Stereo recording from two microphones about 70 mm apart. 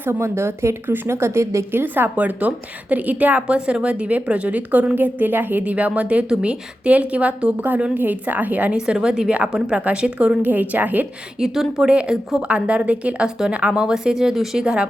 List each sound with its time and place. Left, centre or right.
0.0 s a woman's voice: right
1.8 s a woman's voice: right
11.3 s a woman's voice: centre